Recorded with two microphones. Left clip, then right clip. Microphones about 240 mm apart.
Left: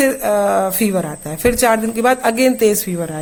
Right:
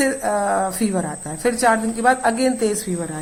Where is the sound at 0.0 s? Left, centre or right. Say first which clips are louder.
Left 5 dB; left.